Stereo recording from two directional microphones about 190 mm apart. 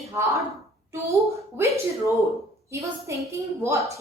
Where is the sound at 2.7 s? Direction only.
15° right (ahead or behind).